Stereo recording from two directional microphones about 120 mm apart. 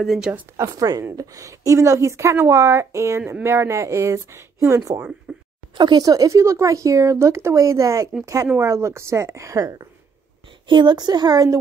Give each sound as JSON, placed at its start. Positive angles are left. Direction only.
{"t": 0.0, "sound": "speech", "side_deg": 0}
{"t": 0.6, "sound": "a woman's voice", "side_deg": -30}
{"t": 5.3, "sound": "a sound", "side_deg": -5}
{"t": 5.8, "sound": "a woman's voice", "side_deg": -35}
{"t": 10.7, "sound": "speech", "side_deg": -40}